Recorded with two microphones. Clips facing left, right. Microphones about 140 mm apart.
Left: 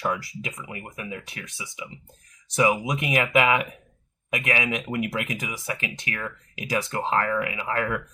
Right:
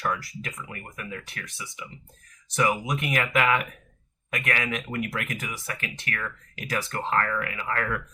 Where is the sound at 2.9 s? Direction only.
15° left (ahead or behind).